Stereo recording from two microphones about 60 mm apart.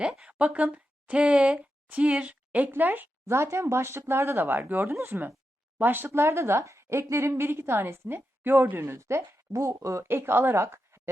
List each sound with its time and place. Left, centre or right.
0.3 s speech: right
3.2 s a woman's voice: right
5.8 s speech: right
6.1 s a woman's voice: right
9.5 s speech: right
10.0 s speech: right